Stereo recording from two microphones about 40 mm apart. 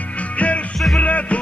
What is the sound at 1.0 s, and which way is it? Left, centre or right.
Music, left.